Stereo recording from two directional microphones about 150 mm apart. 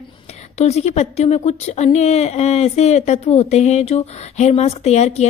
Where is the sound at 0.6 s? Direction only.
45° left (ahead or behind).